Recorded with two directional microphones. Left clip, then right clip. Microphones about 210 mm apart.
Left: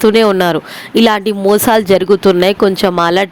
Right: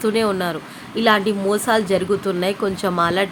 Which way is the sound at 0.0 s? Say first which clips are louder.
Left 10 dB; 40° left (ahead or behind).